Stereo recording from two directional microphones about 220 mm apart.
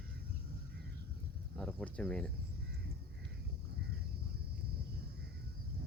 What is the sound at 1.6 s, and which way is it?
Speech, 5° left (ahead or behind).